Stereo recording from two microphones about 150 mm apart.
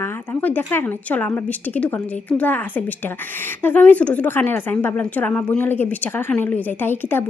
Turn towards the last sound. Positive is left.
turn(degrees=15)  # may be behind; listen again after turning